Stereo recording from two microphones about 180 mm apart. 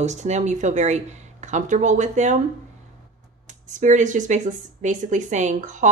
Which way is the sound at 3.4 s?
45° right (ahead or behind).